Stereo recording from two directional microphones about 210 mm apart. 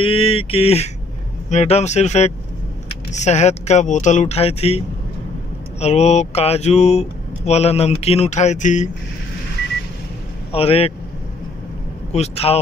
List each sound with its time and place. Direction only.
0.0 s mantra: 25° left (ahead or behind)
1.5 s speech: 30° left (ahead or behind)
10.5 s mantra: 30° left (ahead or behind)
12.1 s mantra: 30° left (ahead or behind)